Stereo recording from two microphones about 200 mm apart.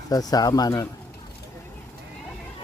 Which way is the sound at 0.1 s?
20° left (ahead or behind).